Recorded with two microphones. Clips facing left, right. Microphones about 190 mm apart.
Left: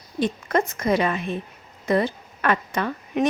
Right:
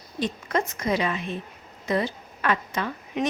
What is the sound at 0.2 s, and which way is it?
A woman's voice, 55° left (ahead or behind).